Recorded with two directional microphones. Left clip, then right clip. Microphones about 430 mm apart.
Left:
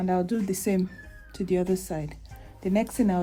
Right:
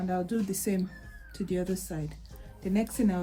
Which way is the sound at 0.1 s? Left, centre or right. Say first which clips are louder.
Left 4 dB; centre.